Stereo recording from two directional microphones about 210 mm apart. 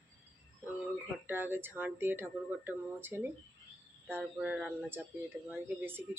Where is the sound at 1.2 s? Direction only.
10° right (ahead or behind).